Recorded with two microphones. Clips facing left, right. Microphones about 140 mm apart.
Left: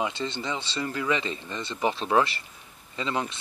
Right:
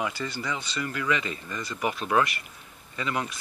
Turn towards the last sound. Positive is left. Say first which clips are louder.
# left 1 dB
turn(degrees=25)  # may be behind; listen again after turning